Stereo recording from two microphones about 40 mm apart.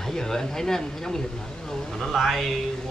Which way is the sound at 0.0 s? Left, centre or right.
Centre.